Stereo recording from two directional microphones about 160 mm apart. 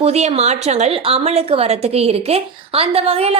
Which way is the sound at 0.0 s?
40° right (ahead or behind).